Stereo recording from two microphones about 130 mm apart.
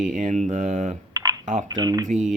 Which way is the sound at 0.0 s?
85° right.